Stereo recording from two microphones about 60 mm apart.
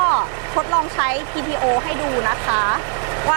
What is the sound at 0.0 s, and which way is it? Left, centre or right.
Vehicle, right.